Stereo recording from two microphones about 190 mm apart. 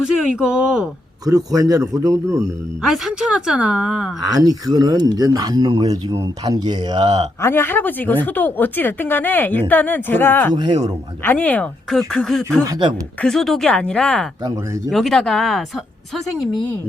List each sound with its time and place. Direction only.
0.0 s speech: 5° right (ahead or behind)
1.2 s a man's voice: 20° right (ahead or behind)
2.8 s speech: centre (ahead or behind)
4.2 s speech: 20° right (ahead or behind)
7.4 s speech: 10° left (ahead or behind)
10.5 s speech: 20° right (ahead or behind)
11.2 s speech: 10° left (ahead or behind)